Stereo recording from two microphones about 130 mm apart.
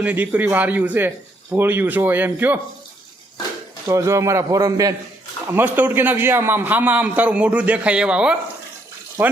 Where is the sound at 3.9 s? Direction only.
20° right (ahead or behind).